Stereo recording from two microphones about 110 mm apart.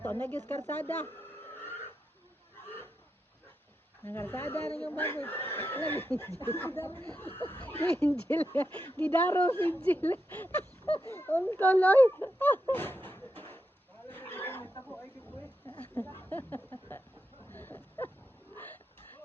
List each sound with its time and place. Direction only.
0.0 s speech: 15° left (ahead or behind)
1.5 s burping: 20° left (ahead or behind)
4.0 s speech: 20° left (ahead or behind)
12.7 s a sound: 20° left (ahead or behind)
14.1 s wild animals: 20° left (ahead or behind)
16.1 s speech: 20° left (ahead or behind)
17.5 s a sound: 15° left (ahead or behind)